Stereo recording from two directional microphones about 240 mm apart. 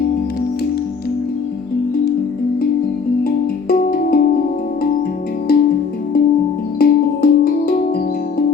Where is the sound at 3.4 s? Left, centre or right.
Left.